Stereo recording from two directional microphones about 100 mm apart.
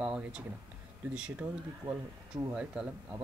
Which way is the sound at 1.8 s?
35° right (ahead or behind).